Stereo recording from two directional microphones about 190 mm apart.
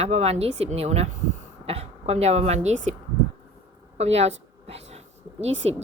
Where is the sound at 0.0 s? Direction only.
35° right (ahead or behind).